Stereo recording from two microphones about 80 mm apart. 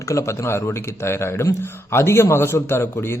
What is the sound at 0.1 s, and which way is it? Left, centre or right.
A man's voice, left.